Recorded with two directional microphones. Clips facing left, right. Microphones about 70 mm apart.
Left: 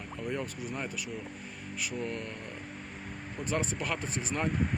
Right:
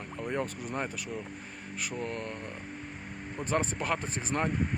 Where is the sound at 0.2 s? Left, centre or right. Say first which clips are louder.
Right 2 dB; right.